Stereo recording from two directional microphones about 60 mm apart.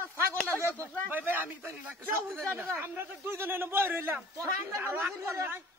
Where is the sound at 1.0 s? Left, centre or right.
Right.